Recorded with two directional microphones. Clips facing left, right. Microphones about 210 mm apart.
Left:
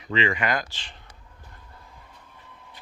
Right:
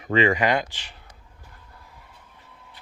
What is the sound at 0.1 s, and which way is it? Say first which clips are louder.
Speech: right 5 dB; 45° right (ahead or behind).